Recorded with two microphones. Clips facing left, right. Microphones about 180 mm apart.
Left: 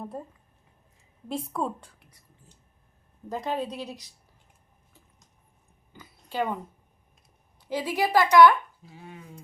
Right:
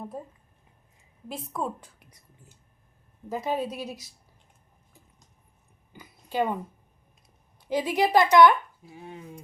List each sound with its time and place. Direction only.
0.0 s a woman's voice: centre (ahead or behind)
1.3 s a woman's voice: 5° right (ahead or behind)
3.2 s a woman's voice: 10° right (ahead or behind)
5.9 s a sound: 15° right (ahead or behind)
7.7 s speech: 15° right (ahead or behind)